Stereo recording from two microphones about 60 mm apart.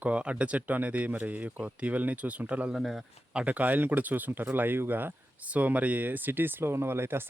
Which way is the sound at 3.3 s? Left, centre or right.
Right.